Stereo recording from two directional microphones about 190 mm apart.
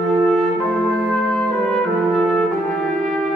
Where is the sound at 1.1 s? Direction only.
5° left (ahead or behind).